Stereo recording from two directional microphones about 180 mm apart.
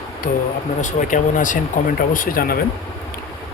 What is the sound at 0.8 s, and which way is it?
Speech, 45° left (ahead or behind).